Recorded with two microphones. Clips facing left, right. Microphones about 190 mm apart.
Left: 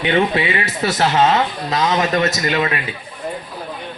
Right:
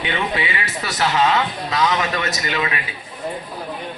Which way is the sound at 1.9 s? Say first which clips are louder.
Left 5 dB; 40° left (ahead or behind).